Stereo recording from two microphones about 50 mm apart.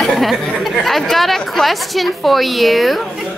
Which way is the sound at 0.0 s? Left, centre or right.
Centre.